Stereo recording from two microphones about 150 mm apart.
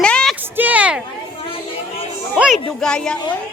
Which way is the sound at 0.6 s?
10° right (ahead or behind).